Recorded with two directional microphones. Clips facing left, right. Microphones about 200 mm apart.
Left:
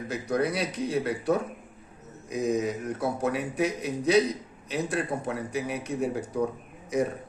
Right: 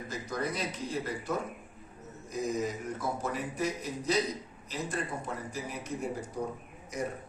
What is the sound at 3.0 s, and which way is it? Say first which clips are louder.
Speech: left 7 dB; 65° left (ahead or behind).